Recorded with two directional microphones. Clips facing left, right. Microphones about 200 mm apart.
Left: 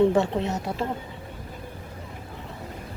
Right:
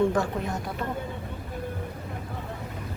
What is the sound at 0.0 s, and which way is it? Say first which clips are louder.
Speech: left 4 dB; 25° left (ahead or behind).